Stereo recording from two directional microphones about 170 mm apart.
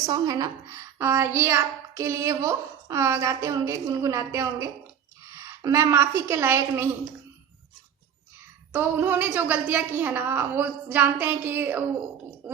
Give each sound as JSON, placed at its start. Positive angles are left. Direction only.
{"t": 0.0, "sound": "a woman's voice", "side_deg": -20}
{"t": 8.7, "sound": "a woman's voice", "side_deg": -10}